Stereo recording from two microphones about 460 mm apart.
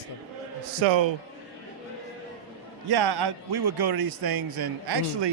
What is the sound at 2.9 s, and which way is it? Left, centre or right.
A man's voice, right.